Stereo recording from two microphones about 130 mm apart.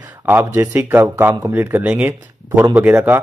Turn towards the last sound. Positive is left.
turn(degrees=-15)  # may be behind; listen again after turning